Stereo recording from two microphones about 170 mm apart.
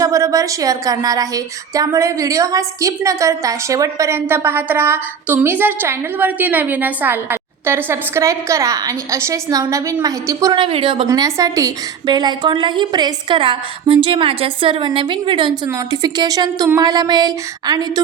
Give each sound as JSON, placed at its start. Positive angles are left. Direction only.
{"t": 0.0, "sound": "a woman's voice", "side_deg": -20}
{"t": 10.5, "sound": "a woman's voice", "side_deg": -30}